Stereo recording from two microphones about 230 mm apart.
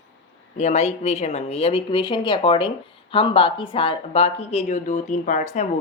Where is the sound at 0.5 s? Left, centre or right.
Left.